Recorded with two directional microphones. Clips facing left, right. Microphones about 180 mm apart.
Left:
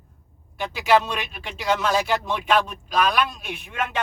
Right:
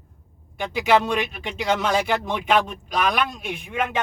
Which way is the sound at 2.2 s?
15° right (ahead or behind).